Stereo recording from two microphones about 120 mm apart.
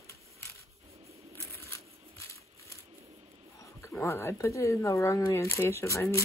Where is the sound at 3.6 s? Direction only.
20° left (ahead or behind).